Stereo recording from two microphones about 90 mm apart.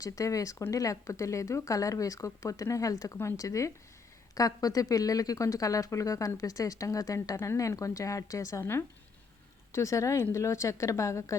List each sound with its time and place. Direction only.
0.0 s speech: 40° left (ahead or behind)